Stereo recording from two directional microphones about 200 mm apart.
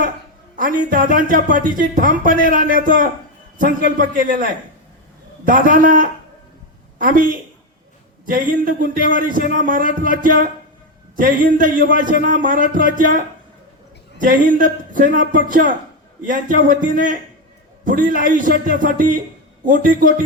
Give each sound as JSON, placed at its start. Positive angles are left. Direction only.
{"t": 0.5, "sound": "speech", "side_deg": -40}
{"t": 3.9, "sound": "speech", "side_deg": -40}